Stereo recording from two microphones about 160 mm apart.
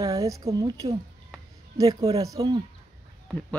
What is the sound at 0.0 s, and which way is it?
A woman's voice, 20° right (ahead or behind).